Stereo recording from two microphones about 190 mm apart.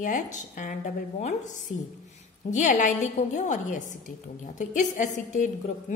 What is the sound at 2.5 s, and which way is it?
A woman's voice, 40° left (ahead or behind).